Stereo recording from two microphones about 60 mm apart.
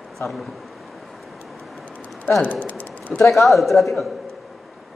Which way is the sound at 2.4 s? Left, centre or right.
Left.